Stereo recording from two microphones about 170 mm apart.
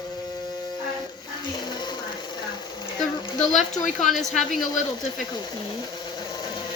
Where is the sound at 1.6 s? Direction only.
25° left (ahead or behind).